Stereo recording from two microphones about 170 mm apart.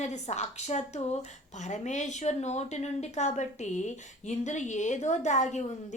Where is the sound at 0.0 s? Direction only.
40° left (ahead or behind).